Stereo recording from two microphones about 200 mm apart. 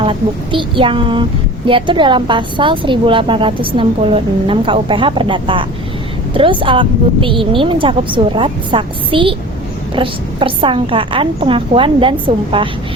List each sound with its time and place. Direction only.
0.0 s a woman's voice: 25° right (ahead or behind)